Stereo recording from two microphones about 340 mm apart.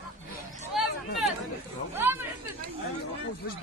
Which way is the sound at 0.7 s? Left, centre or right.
Centre.